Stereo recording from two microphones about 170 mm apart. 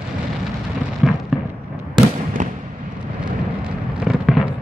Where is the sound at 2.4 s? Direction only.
45° right (ahead or behind).